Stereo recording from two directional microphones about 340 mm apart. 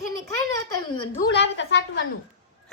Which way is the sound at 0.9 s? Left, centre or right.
Left.